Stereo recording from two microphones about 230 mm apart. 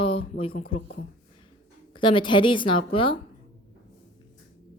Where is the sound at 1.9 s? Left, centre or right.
Left.